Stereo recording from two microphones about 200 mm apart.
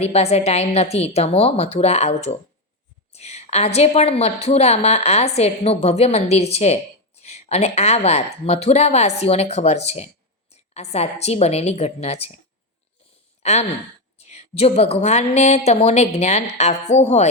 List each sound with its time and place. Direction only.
0.0 s a woman's voice: 30° left (ahead or behind)
3.1 s a sound: 30° left (ahead or behind)
3.8 s a woman's voice: 30° left (ahead or behind)
13.4 s a woman's voice: 35° left (ahead or behind)